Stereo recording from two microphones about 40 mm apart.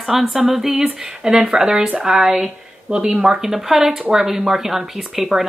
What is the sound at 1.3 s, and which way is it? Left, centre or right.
Speech, centre.